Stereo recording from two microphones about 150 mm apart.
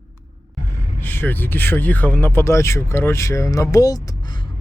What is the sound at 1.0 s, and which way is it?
Speech, 15° left (ahead or behind).